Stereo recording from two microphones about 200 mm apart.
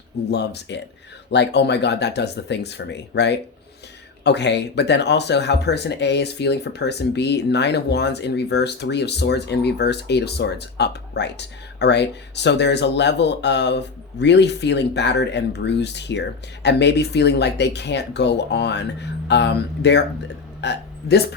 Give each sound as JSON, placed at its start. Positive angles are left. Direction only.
{"t": 0.3, "sound": "speech", "side_deg": 55}
{"t": 20.6, "sound": "burping", "side_deg": 55}